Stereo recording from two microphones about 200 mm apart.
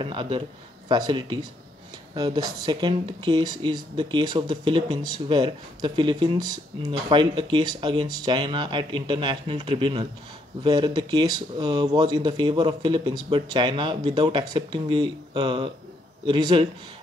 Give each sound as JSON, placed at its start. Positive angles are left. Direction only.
{"t": 0.0, "sound": "speech", "side_deg": -25}